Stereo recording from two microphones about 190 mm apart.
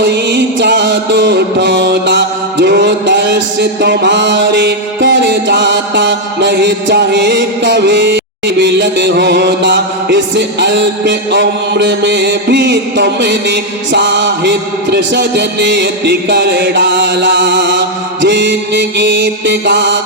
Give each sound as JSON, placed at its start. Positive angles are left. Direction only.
{"t": 0.0, "sound": "music", "side_deg": -65}